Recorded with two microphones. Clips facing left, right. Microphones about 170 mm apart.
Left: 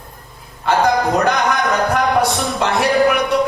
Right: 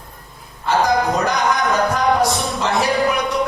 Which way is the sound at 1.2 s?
65° left (ahead or behind).